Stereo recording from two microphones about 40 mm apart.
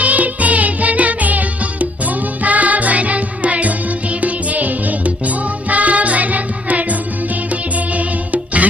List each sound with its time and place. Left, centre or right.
0.0 s music: right